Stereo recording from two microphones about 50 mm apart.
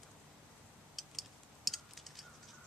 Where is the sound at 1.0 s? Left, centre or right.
Centre.